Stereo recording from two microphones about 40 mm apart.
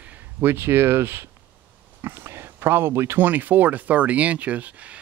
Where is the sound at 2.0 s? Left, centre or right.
Right.